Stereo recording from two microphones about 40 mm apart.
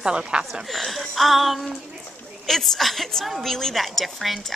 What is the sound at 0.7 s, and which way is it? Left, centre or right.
A woman's voice, centre.